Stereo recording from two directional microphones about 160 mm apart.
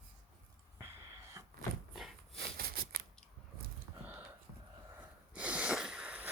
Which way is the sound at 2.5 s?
70° right (ahead or behind).